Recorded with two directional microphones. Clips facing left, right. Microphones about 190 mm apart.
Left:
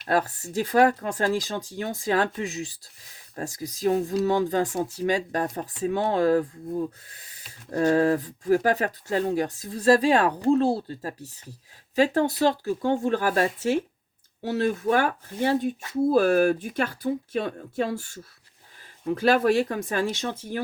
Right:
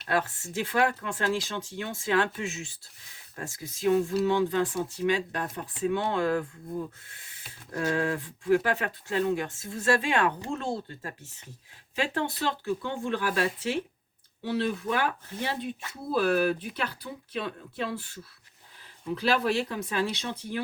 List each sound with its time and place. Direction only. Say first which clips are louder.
0.1 s speech: left 4 dB; 40° left (ahead or behind)